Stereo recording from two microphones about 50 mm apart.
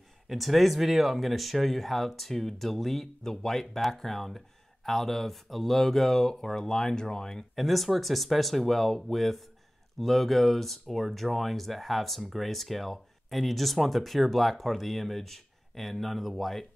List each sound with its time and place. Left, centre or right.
0.3 s speech: centre
7.5 s speech: centre